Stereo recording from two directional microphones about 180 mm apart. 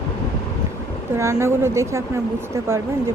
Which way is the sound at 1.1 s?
15° right (ahead or behind).